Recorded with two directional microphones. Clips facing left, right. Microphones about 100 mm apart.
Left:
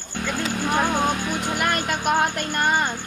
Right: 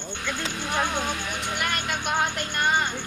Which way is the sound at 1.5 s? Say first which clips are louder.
Left 4 dB; 45° left (ahead or behind).